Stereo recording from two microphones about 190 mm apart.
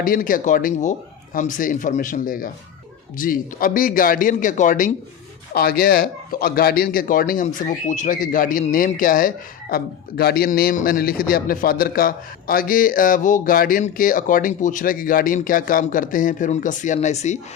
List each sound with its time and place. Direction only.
0.0 s a man's voice: 45° left (ahead or behind)